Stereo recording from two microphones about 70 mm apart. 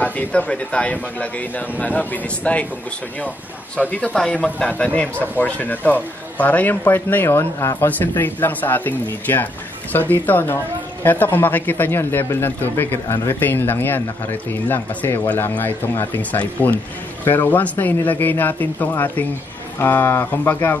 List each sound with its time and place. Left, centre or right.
0.0 s speech: left
4.1 s speech: centre; by 20.7 s left